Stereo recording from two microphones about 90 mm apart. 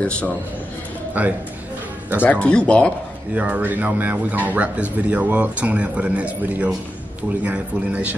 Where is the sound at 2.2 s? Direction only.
10° left (ahead or behind).